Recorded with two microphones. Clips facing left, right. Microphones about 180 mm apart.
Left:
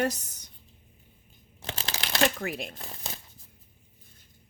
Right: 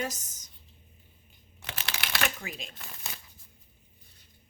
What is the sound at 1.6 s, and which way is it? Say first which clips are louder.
Shuffling cards: left 3 dB; 30° left (ahead or behind).